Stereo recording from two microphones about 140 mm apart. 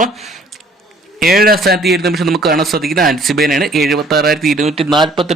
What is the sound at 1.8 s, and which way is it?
Speech, centre (ahead or behind).